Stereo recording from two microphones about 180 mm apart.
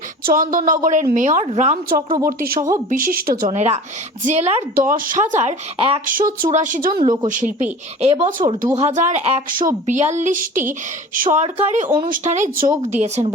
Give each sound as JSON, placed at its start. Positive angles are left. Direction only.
{"t": 0.3, "sound": "speech", "side_deg": -45}
{"t": 2.2, "sound": "speech", "side_deg": -55}
{"t": 4.7, "sound": "speech", "side_deg": -50}
{"t": 6.1, "sound": "speech", "side_deg": -50}
{"t": 7.0, "sound": "speech", "side_deg": -25}
{"t": 7.3, "sound": "speech", "side_deg": -45}
{"t": 9.5, "sound": "speech", "side_deg": -50}